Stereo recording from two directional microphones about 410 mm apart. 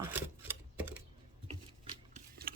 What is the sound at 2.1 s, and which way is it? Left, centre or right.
Shuffling cards, right.